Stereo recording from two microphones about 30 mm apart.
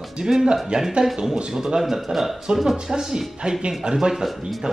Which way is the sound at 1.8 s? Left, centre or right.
Centre.